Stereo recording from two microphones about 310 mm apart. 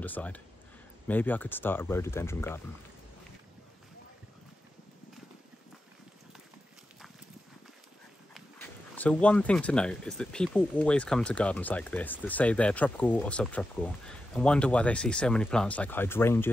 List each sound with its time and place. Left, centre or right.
0.0 s speech: centre
8.4 s speech: centre